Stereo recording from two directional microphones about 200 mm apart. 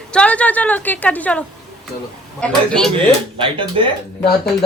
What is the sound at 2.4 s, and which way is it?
Speech, 5° left (ahead or behind).